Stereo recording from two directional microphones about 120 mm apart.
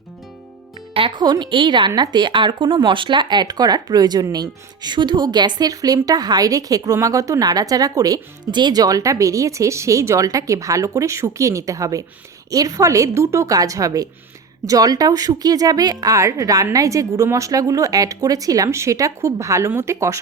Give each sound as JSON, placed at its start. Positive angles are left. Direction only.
{"t": 0.9, "sound": "speech", "side_deg": -40}